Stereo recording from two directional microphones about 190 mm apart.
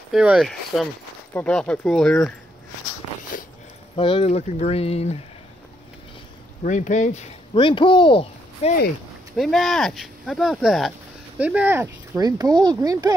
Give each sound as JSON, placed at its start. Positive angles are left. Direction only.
{"t": 0.1, "sound": "speech", "side_deg": -5}
{"t": 3.3, "sound": "a sound", "side_deg": 45}
{"t": 3.9, "sound": "speech", "side_deg": 25}
{"t": 6.6, "sound": "speech", "side_deg": 40}
{"t": 9.4, "sound": "speech", "side_deg": 0}